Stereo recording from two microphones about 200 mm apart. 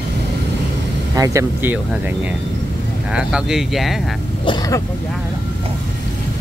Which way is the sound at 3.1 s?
5° right (ahead or behind).